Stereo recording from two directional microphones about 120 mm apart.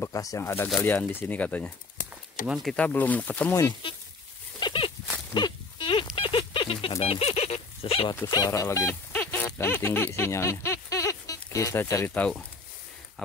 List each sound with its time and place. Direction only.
0.0 s speech: 30° left (ahead or behind); by 1.7 s 10° left (ahead or behind)
2.4 s speech: 5° right (ahead or behind)
2.7 s speech: 10° left (ahead or behind)
4.6 s a sound: 45° left (ahead or behind)
7.0 s speech: 60° left (ahead or behind)
8.3 s a sound: 30° left (ahead or behind)
11.5 s speech: 20° left (ahead or behind)